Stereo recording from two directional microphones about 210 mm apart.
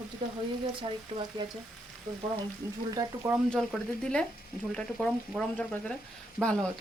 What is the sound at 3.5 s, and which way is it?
Speech, 5° left (ahead or behind).